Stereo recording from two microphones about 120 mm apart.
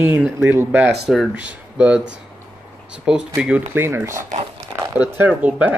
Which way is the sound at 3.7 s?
20° right (ahead or behind).